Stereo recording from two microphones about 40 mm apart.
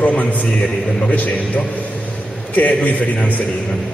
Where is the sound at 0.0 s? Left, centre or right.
Left.